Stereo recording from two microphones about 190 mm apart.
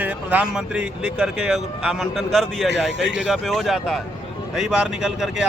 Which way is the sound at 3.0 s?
70° right (ahead or behind).